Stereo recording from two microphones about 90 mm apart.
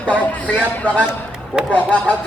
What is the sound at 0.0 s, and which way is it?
Speech, 15° left (ahead or behind).